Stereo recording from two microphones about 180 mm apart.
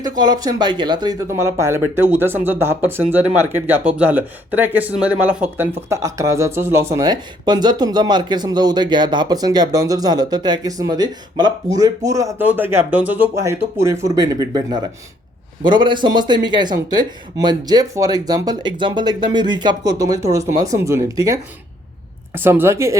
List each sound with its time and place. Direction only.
0.2 s speech: 20° right (ahead or behind)